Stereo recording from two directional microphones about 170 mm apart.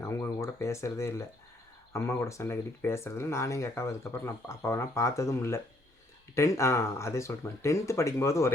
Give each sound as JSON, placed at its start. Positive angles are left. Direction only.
{"t": 0.0, "sound": "speech", "side_deg": 15}